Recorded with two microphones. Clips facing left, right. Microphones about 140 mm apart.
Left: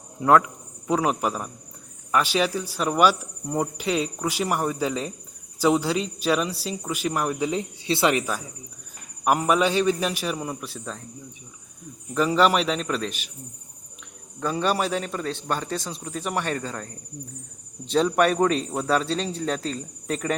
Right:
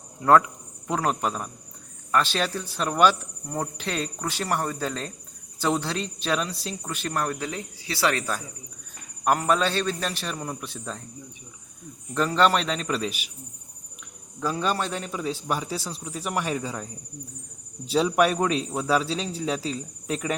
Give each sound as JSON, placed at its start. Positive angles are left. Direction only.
{"t": 0.3, "sound": "speech", "side_deg": 0}
{"t": 2.1, "sound": "cricket", "side_deg": 10}
{"t": 12.1, "sound": "a man's voice", "side_deg": 5}
{"t": 14.3, "sound": "a man's voice", "side_deg": 0}